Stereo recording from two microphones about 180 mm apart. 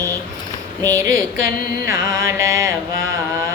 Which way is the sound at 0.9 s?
15° right (ahead or behind).